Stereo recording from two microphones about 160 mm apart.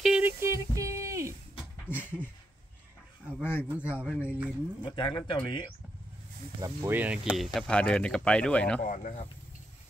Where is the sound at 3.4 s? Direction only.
15° left (ahead or behind).